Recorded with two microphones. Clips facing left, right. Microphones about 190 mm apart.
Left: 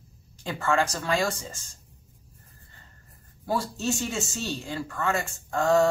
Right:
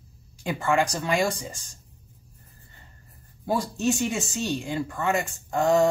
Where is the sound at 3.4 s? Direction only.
15° right (ahead or behind).